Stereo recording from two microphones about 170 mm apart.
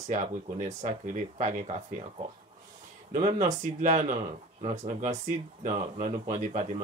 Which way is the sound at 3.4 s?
45° right (ahead or behind).